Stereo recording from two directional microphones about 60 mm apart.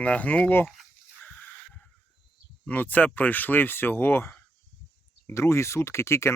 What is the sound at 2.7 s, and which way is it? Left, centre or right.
Speech, left.